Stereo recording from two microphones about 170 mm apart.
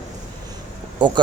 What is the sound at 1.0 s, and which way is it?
Speech, 25° right (ahead or behind).